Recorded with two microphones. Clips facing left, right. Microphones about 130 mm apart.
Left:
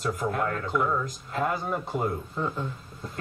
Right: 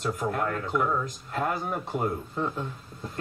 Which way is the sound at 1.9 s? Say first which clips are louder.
Right 1 dB; centre (ahead or behind).